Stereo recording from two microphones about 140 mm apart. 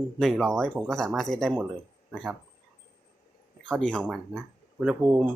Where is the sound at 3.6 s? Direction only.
5° left (ahead or behind).